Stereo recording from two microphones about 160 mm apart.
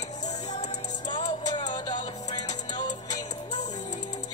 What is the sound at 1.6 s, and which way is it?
Music, 50° left (ahead or behind).